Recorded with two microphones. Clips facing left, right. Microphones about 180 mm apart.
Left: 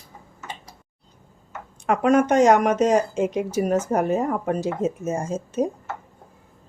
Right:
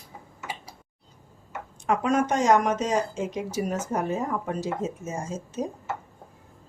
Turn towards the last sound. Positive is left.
turn(degrees=60)  # may be behind; listen again after turning